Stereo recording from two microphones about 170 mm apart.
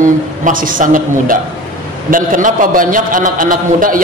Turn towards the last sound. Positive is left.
turn(degrees=-55)  # may be behind; listen again after turning